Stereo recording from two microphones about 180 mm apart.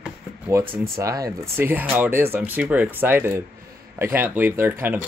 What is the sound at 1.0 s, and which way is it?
Speech, 20° right (ahead or behind).